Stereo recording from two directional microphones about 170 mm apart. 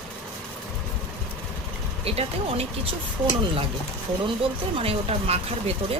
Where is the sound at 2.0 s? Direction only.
35° right (ahead or behind).